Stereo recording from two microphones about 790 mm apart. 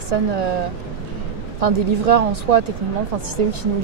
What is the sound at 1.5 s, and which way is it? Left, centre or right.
A woman's voice, right.